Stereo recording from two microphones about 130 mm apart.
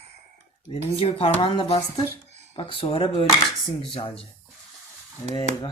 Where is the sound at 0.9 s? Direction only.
50° left (ahead or behind).